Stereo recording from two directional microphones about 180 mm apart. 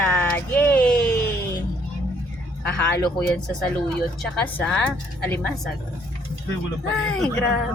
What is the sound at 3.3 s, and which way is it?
A woman's voice, 5° left (ahead or behind).